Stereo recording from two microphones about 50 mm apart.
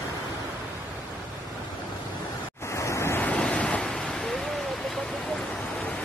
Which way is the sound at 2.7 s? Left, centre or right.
Left.